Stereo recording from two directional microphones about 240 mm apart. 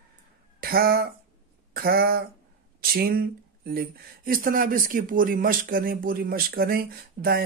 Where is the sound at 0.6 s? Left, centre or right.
Right.